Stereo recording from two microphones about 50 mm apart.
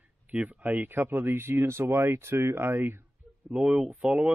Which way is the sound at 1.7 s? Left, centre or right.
Right.